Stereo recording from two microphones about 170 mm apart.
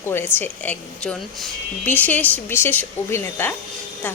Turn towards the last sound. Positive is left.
turn(degrees=10)  # may be behind; listen again after turning